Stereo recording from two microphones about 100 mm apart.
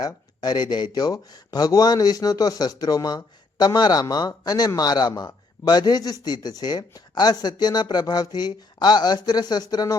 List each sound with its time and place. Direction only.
0.0 s speech: 45° left (ahead or behind)